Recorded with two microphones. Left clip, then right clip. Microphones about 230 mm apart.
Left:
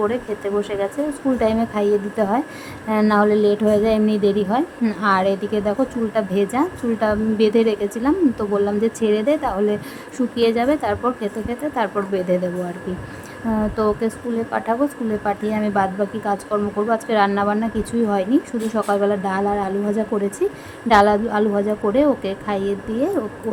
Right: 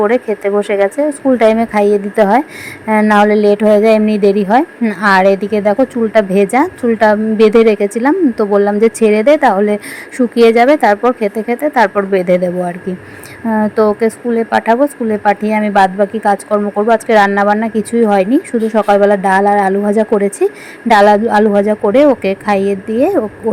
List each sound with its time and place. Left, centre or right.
0.0 s speech: right
13.5 s speech: right